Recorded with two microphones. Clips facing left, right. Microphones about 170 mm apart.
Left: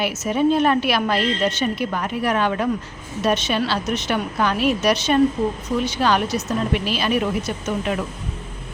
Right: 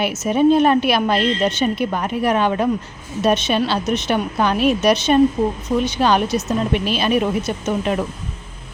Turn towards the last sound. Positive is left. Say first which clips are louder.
# right 3 dB
turn(degrees=-25)  # may be behind; listen again after turning